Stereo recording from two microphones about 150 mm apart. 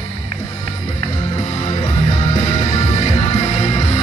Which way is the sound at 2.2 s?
45° left (ahead or behind).